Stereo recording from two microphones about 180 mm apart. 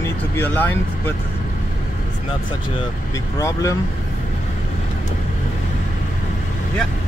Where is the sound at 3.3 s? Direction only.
20° left (ahead or behind).